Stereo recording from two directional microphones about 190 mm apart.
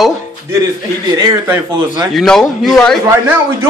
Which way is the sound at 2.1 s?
Centre (ahead or behind).